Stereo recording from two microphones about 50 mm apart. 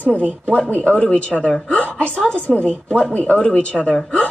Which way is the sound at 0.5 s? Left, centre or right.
Left.